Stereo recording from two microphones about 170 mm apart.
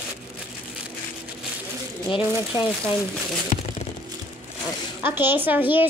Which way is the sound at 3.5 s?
50° left (ahead or behind).